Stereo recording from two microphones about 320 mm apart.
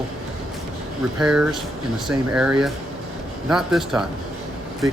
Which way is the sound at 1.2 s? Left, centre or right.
Centre.